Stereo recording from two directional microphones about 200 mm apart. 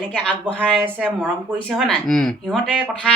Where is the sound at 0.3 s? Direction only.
5° left (ahead or behind).